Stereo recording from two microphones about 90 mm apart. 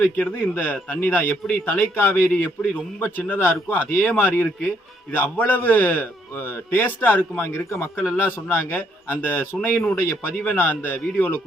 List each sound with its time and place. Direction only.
0.0 s a man's voice: 20° left (ahead or behind)